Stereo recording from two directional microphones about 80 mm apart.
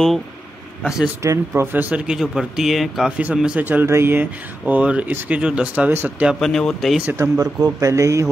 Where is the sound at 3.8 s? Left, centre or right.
Right; by 5.9 s centre.